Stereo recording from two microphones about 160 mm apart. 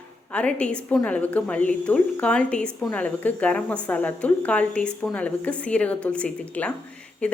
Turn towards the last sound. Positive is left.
turn(degrees=5)  # may be behind; listen again after turning